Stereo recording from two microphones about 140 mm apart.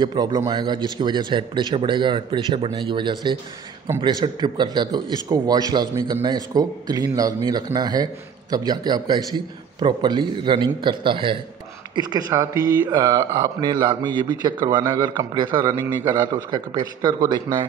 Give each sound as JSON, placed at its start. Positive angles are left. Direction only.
{"t": 0.0, "sound": "a man's voice", "side_deg": -30}
{"t": 15.5, "sound": "speech", "side_deg": -20}
{"t": 16.3, "sound": "a man's voice", "side_deg": -30}